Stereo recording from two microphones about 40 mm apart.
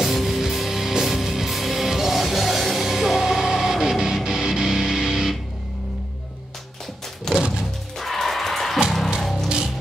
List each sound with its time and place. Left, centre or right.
0.0 s music: centre
7.3 s music: centre
8.0 s music: centre